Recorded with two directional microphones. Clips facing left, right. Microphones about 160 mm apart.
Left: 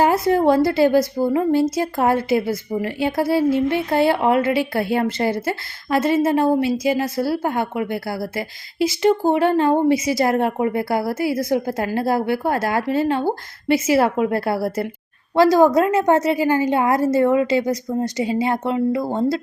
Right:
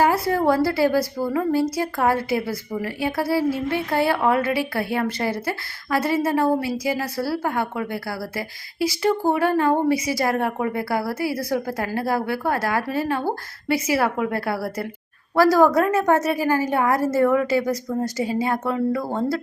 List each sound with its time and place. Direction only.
0.0 s a woman's voice: 25° left (ahead or behind)